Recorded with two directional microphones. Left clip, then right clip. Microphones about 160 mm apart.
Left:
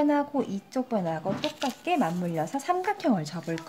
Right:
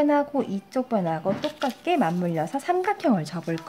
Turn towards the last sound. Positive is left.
turn(degrees=-15)  # may be behind; listen again after turning